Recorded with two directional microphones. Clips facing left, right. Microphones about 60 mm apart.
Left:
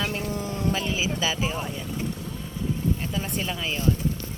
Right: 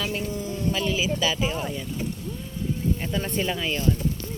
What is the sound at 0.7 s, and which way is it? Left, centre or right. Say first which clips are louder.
Speech: right 3 dB; left.